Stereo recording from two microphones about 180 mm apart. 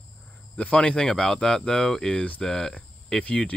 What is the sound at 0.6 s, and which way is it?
Speech, 5° left (ahead or behind).